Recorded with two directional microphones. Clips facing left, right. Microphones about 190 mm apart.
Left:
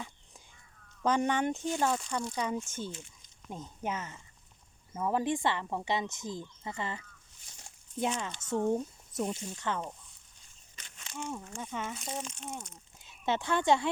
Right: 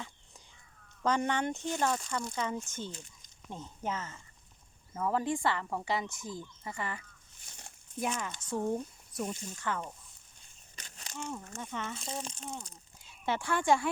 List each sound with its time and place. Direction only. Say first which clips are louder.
1.0 s speech: left 2 dB; 15° left (ahead or behind)
10.8 s a sound: even; 35° right (ahead or behind)
11.2 s speech: left 1 dB; 15° left (ahead or behind)
12.2 s speech: even; 35° right (ahead or behind)
13.0 s speech: left 2 dB; 20° left (ahead or behind)